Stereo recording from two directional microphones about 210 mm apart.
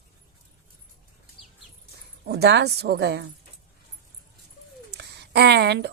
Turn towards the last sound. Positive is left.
turn(degrees=-50)  # may be behind; listen again after turning